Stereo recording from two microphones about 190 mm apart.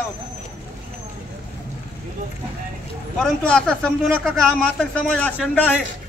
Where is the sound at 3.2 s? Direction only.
5° left (ahead or behind).